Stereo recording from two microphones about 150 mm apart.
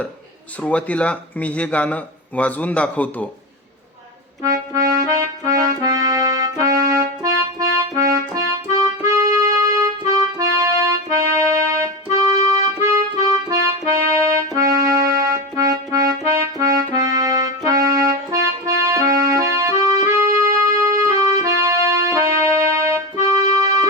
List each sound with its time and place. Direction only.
0.6 s speech: 10° left (ahead or behind)
4.4 s accordion: 20° right (ahead or behind)
10.1 s music: 25° right (ahead or behind)
19.8 s keyboard: 25° right (ahead or behind)